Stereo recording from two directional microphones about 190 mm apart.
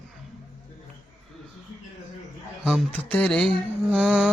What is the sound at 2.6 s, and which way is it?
Speech, 5° left (ahead or behind).